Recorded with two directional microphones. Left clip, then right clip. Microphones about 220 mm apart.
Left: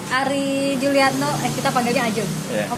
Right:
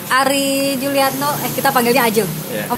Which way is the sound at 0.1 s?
35° right (ahead or behind).